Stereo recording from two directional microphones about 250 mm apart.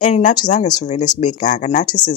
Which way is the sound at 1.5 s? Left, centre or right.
Left.